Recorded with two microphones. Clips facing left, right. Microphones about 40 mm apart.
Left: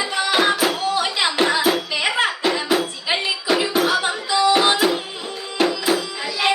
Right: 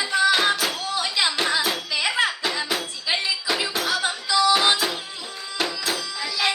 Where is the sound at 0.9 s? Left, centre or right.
Left.